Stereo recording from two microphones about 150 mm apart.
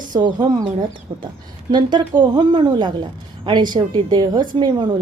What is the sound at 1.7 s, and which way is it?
A woman's voice, 30° right (ahead or behind).